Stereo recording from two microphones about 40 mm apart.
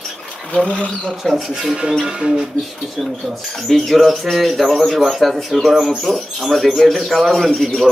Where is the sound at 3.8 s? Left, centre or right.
Centre.